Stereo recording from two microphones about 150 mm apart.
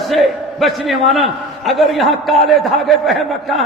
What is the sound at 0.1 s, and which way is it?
A man's voice, centre (ahead or behind).